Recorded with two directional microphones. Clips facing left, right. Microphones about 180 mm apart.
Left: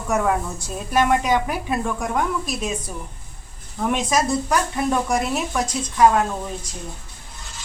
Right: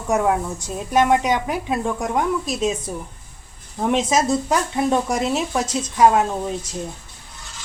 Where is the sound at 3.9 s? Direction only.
25° right (ahead or behind).